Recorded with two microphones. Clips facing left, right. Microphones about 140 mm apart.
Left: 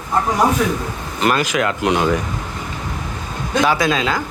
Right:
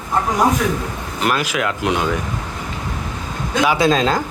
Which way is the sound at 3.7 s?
35° right (ahead or behind).